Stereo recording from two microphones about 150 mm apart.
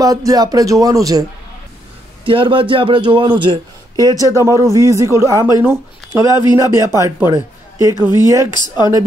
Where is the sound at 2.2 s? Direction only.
35° right (ahead or behind); by 5.5 s 20° right (ahead or behind).